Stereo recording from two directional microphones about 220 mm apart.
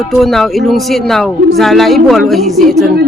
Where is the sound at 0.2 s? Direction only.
Centre (ahead or behind).